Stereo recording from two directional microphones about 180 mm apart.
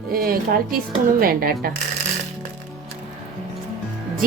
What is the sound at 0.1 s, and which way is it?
Speech, 55° right (ahead or behind).